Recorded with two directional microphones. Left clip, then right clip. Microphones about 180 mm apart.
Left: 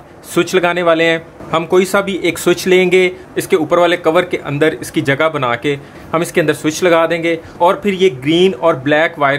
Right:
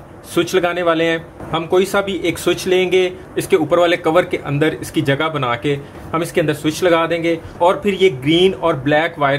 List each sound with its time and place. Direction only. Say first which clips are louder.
0.3 s speech: left 3 dB; 20° left (ahead or behind)